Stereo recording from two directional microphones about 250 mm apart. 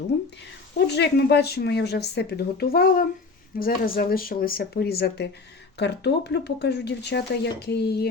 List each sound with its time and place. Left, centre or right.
0.9 s speech: left